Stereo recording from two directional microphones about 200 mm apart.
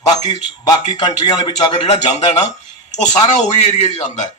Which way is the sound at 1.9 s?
35° left (ahead or behind).